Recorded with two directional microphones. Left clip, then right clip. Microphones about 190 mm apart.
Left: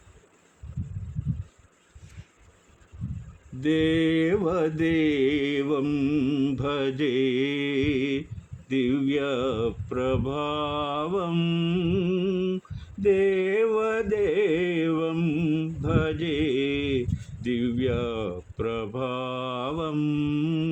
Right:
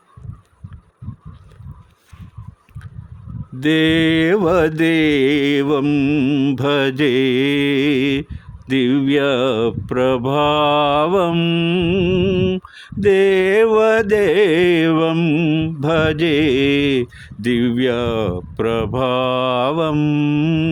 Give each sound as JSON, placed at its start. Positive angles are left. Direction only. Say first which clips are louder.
{"t": 3.6, "sound": "mantra", "louder": "right 8 dB", "side_deg": -55}